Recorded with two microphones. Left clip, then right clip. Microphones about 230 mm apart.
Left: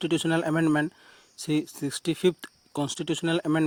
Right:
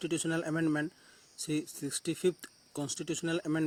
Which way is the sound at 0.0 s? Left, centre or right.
Left.